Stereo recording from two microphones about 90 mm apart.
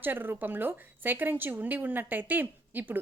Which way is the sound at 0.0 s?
20° right (ahead or behind).